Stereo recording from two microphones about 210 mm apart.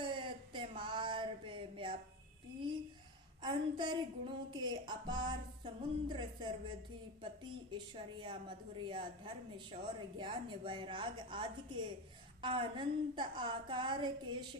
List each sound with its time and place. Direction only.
0.0 s a sound: 25° right (ahead or behind)
3.4 s a woman's voice: 20° right (ahead or behind)
7.7 s a woman's voice: 25° right (ahead or behind)